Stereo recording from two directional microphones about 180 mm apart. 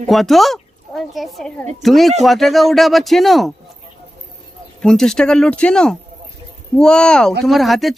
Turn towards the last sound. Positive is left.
turn(degrees=0)  # may be behind; listen again after turning